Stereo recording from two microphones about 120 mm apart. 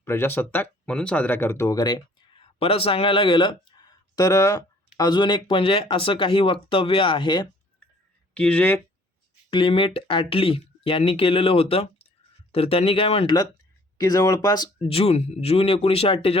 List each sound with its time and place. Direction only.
0.0 s speech: 20° left (ahead or behind)
2.4 s speech: 55° left (ahead or behind)
8.3 s speech: 10° left (ahead or behind)
9.5 s speech: 45° left (ahead or behind)
13.2 s speech: 35° left (ahead or behind)
14.8 s speech: 55° left (ahead or behind)